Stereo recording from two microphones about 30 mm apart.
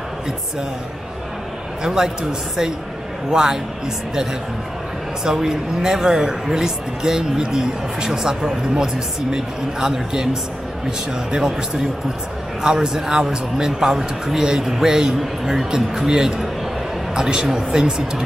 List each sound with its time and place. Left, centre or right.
1.9 s a man's voice: centre
3.3 s speech: right
5.2 s speech: right
12.6 s a man's voice: right